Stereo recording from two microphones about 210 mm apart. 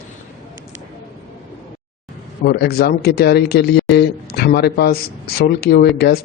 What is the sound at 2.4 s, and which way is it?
Speech, 50° left (ahead or behind).